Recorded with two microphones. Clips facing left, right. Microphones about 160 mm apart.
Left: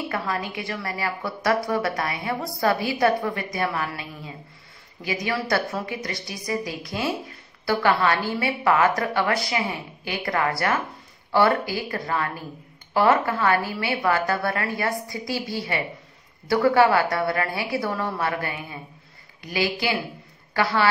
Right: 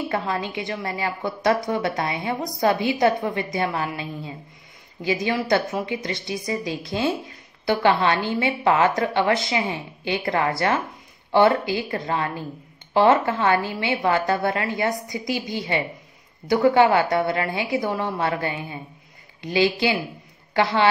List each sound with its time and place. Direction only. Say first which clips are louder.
0.1 s a woman's voice: right 2 dB; 25° right (ahead or behind)